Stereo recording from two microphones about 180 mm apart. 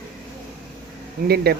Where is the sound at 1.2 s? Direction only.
60° right (ahead or behind).